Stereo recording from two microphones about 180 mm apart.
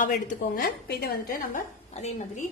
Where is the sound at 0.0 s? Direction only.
45° left (ahead or behind).